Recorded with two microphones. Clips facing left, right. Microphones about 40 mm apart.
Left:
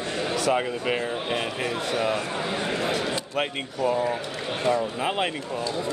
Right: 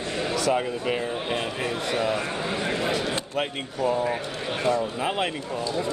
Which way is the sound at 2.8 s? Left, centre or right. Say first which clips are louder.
Even; centre.